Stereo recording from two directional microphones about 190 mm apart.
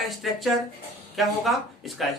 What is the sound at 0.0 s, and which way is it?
A man's voice, centre (ahead or behind).